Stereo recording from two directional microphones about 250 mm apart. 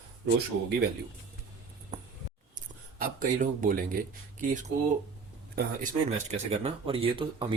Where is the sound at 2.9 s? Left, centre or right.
Right.